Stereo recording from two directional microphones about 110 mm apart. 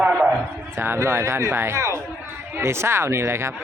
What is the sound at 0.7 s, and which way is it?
Speech, 20° right (ahead or behind).